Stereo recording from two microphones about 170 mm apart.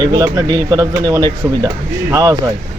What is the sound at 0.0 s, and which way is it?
Speech, 20° right (ahead or behind).